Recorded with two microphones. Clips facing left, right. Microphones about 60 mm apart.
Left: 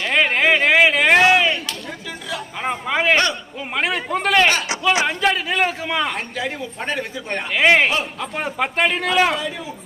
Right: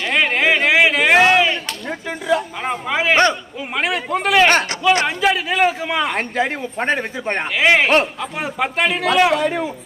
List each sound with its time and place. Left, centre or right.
0.0 s a sound: centre
1.9 s a sound: right
2.6 s speech: centre
6.1 s speech: right
7.5 s speech: centre
9.3 s a man's voice: right